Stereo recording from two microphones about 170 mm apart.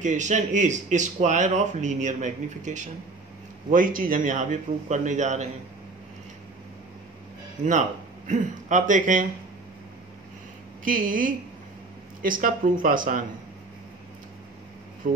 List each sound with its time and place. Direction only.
0.0 s speech: 45° right (ahead or behind)
8.3 s speech: 45° right (ahead or behind)
10.8 s speech: 50° right (ahead or behind)
15.0 s speech: 50° right (ahead or behind)